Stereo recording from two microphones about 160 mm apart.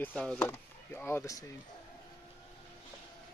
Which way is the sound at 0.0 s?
5° left (ahead or behind).